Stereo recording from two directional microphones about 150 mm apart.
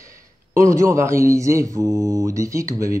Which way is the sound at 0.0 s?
20° right (ahead or behind).